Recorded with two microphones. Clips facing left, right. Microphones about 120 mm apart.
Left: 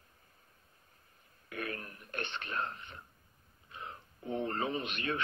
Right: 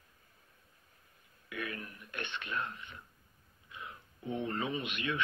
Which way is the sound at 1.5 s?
40° left (ahead or behind).